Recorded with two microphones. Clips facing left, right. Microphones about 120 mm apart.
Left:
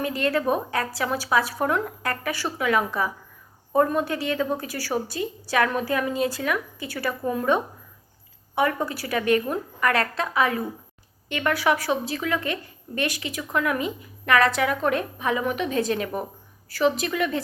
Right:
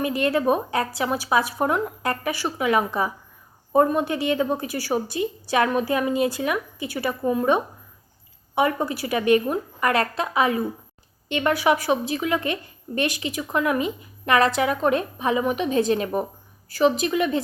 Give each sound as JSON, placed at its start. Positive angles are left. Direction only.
{"t": 0.0, "sound": "a woman's voice", "side_deg": -20}